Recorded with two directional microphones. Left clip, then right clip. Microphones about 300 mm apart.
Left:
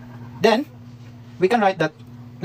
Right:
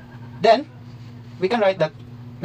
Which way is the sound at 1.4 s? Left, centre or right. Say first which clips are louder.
Left 1 dB; left.